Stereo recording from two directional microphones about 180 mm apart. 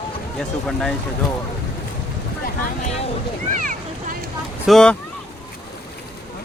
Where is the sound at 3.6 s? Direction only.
45° right (ahead or behind).